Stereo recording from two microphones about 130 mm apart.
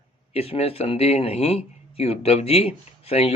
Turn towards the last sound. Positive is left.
turn(degrees=50)  # may be behind; listen again after turning